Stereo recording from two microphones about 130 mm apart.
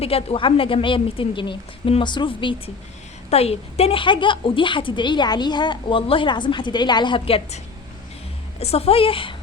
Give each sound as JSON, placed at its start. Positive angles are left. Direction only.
{"t": 0.0, "sound": "a woman's voice", "side_deg": 50}
{"t": 3.2, "sound": "a woman's voice", "side_deg": 50}